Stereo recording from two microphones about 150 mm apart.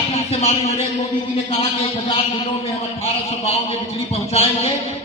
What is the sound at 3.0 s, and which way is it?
Music, 45° left (ahead or behind).